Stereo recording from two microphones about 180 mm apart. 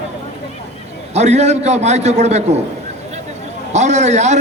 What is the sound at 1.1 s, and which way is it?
A man's voice, 40° right (ahead or behind).